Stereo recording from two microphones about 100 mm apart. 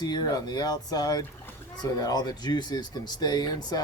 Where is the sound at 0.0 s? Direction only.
45° left (ahead or behind).